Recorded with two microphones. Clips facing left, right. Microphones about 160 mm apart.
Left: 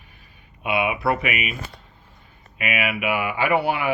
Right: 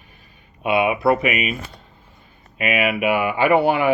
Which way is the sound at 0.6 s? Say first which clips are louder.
Right 5 dB; 25° right (ahead or behind).